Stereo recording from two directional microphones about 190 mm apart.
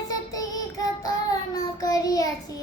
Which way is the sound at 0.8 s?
20° left (ahead or behind).